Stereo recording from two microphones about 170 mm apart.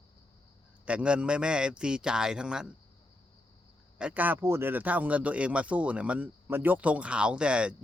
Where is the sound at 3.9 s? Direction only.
10° right (ahead or behind).